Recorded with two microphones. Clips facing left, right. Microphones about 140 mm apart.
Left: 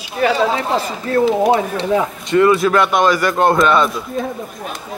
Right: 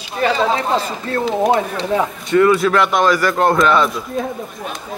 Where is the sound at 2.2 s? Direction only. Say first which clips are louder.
Even; 25° left (ahead or behind).